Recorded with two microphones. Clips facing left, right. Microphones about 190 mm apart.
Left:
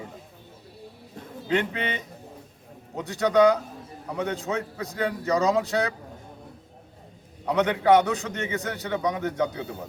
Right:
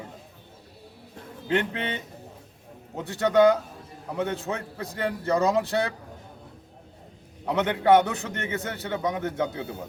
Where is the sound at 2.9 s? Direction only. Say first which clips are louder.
Even; 5° right (ahead or behind).